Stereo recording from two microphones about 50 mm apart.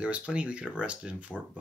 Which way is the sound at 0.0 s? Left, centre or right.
Right.